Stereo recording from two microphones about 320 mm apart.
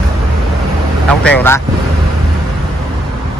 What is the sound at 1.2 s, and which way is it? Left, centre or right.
Speech, centre.